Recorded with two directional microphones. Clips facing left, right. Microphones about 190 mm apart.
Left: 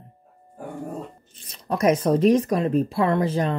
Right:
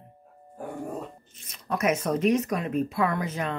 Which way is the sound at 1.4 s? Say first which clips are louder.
Left 5 dB; 35° left (ahead or behind).